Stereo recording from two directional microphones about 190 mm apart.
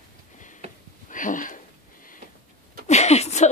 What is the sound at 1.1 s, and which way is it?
Speech, 45° left (ahead or behind).